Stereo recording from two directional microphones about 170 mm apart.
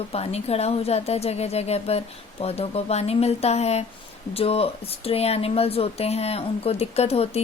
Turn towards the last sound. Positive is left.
turn(degrees=35)  # may be behind; listen again after turning